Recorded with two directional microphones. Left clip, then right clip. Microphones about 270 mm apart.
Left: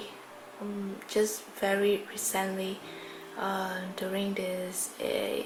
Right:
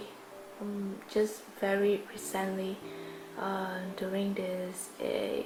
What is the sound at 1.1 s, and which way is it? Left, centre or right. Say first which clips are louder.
Speech: left 2 dB; centre.